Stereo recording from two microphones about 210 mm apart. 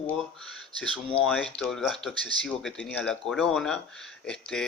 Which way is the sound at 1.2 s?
Centre (ahead or behind).